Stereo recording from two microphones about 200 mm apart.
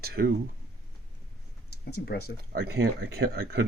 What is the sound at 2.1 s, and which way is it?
Speech, 50° left (ahead or behind).